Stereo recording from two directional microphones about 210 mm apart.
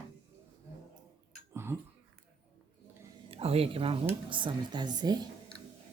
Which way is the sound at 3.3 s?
30° right (ahead or behind).